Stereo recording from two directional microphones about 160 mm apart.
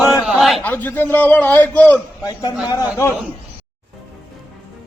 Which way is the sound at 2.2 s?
25° left (ahead or behind).